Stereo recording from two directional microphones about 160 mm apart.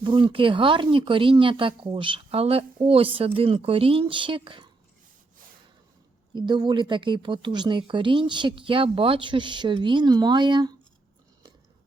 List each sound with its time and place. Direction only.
0.0 s speech: 30° right (ahead or behind)
6.3 s speech: 30° right (ahead or behind)